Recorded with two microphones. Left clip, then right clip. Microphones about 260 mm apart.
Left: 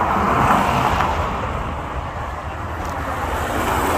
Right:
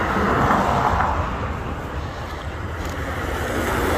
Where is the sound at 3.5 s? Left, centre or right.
Left.